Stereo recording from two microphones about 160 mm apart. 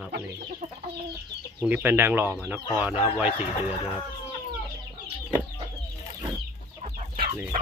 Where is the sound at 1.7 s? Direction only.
10° right (ahead or behind).